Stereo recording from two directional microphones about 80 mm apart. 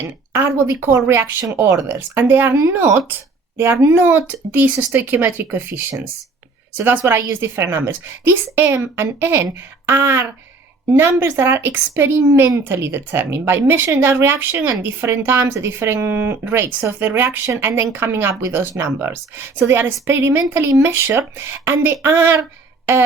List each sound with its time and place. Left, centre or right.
0.3 s a woman's voice: right